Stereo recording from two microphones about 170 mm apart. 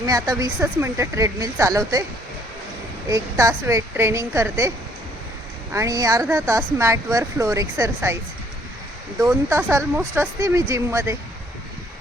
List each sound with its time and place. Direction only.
0.0 s speech: 20° right (ahead or behind)
3.1 s speech: 20° right (ahead or behind)
5.7 s speech: 20° right (ahead or behind)
9.2 s speech: 15° right (ahead or behind)